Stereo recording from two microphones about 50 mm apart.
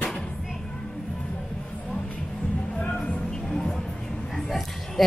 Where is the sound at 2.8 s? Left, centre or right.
Centre.